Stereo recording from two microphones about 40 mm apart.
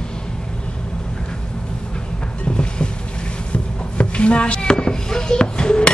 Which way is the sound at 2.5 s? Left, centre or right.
Left.